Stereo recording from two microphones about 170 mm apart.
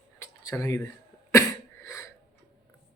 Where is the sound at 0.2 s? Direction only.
15° left (ahead or behind).